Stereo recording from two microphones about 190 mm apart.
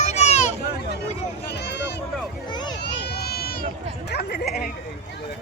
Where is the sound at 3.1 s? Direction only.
55° left (ahead or behind).